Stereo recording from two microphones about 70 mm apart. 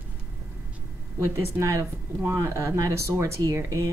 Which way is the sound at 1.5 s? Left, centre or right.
Right.